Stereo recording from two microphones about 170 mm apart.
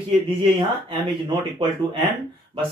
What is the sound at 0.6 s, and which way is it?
Speech, 30° right (ahead or behind).